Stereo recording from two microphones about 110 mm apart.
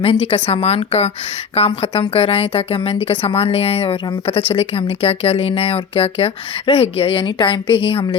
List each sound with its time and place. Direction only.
0.0 s a woman's voice: 60° left (ahead or behind)